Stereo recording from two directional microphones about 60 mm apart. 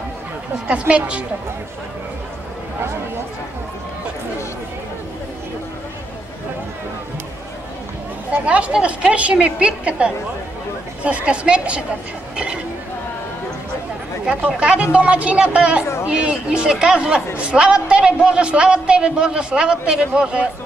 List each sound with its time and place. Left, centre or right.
0.7 s a woman's voice: right
8.3 s a woman's voice: right
14.6 s a woman's voice: centre